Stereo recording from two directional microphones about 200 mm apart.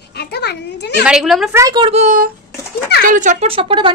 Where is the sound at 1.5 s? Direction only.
15° right (ahead or behind).